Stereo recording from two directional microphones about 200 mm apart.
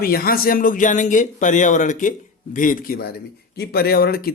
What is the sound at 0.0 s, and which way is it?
Speech, 50° left (ahead or behind).